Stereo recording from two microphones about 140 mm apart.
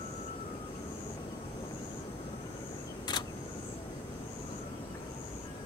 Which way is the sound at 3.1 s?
30° left (ahead or behind).